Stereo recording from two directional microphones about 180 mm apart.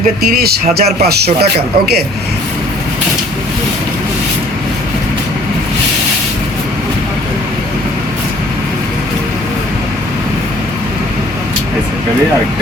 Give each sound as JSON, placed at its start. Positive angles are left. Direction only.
{"t": 0.0, "sound": "speech", "side_deg": -55}